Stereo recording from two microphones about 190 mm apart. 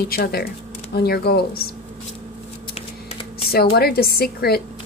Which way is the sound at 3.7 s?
55° left (ahead or behind).